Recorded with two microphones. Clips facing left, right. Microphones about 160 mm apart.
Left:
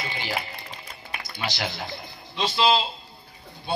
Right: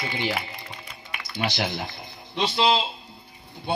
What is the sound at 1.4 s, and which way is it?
A man's voice, 20° right (ahead or behind).